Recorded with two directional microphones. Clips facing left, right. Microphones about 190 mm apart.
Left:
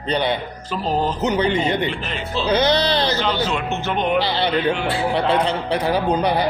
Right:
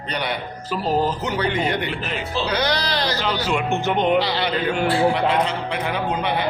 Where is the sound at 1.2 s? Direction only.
20° left (ahead or behind).